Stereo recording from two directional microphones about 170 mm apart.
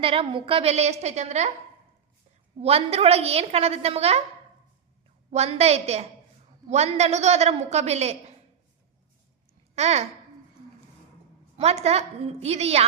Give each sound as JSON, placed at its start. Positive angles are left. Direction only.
{"t": 0.0, "sound": "a woman's voice", "side_deg": -30}
{"t": 2.6, "sound": "a woman's voice", "side_deg": -35}
{"t": 5.3, "sound": "a woman's voice", "side_deg": -40}
{"t": 9.7, "sound": "a woman's voice", "side_deg": -40}
{"t": 11.5, "sound": "a woman's voice", "side_deg": -40}